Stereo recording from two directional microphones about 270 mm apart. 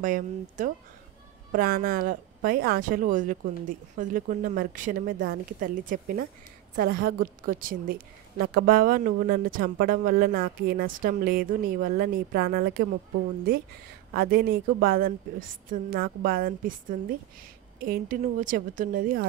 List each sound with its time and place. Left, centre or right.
0.0 s speech: right